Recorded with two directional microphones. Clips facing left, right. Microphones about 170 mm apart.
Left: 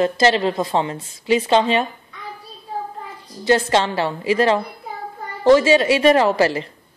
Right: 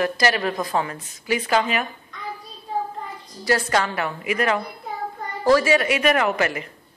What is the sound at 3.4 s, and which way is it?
A woman's voice, 25° left (ahead or behind).